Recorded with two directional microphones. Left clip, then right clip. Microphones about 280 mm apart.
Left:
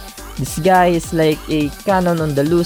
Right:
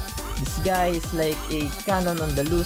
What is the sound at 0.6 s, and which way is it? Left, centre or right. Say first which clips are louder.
Speech: left 11 dB; left.